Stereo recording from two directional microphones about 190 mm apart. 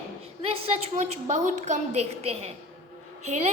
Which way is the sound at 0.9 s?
40° right (ahead or behind).